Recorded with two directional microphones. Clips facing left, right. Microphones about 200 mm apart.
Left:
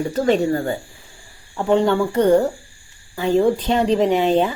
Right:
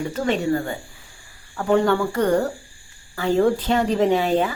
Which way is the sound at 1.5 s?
20° left (ahead or behind).